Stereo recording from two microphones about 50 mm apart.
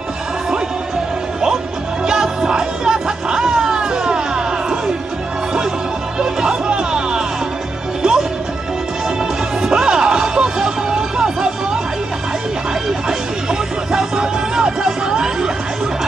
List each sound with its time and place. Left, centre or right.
2.0 s music: centre
6.1 s music: centre
9.6 s music: centre
13.5 s music: centre